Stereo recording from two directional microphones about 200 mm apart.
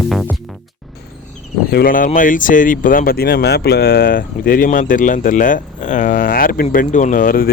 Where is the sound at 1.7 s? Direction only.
45° left (ahead or behind).